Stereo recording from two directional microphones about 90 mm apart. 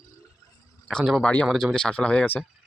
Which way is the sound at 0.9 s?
5° left (ahead or behind).